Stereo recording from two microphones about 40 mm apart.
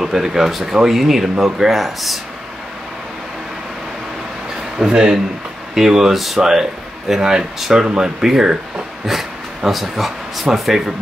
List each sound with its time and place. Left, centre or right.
0.0 s speech: centre
4.7 s speech: centre